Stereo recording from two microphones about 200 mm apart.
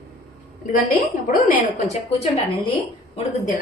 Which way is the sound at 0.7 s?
45° left (ahead or behind).